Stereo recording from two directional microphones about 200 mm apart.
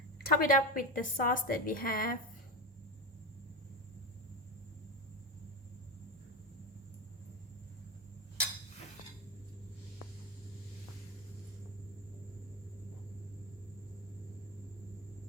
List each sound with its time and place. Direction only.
0.2 s a woman's voice: 45° left (ahead or behind)